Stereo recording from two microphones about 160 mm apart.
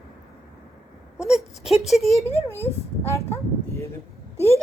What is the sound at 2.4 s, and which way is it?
Speech, 15° left (ahead or behind).